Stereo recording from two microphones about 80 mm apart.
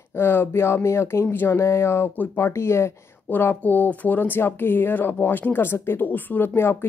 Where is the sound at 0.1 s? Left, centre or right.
Left.